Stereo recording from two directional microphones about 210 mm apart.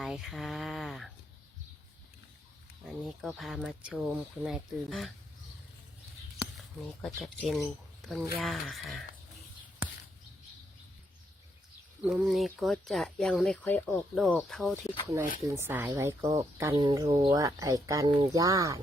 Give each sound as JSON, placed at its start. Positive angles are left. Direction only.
{"t": 0.0, "sound": "speech", "side_deg": 0}
{"t": 2.8, "sound": "speech", "side_deg": 0}
{"t": 6.8, "sound": "speech", "side_deg": 0}
{"t": 12.0, "sound": "speech", "side_deg": 0}
{"t": 15.4, "sound": "speech", "side_deg": -10}